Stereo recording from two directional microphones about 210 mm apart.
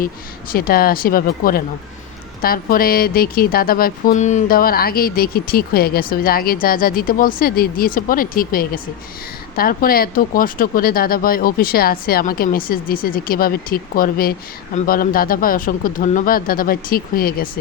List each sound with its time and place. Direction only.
0.5 s speech: 45° left (ahead or behind)